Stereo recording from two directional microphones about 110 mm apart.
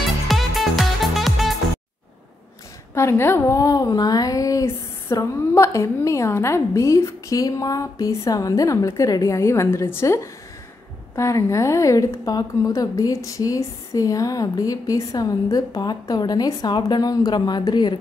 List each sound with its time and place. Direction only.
0.3 s music: centre (ahead or behind)
2.9 s a woman's voice: 25° left (ahead or behind); by 17.9 s 40° left (ahead or behind)